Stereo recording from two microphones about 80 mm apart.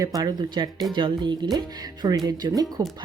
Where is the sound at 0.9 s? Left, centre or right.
Right.